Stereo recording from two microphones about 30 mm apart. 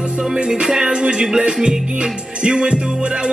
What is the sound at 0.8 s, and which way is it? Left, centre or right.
Speech, right.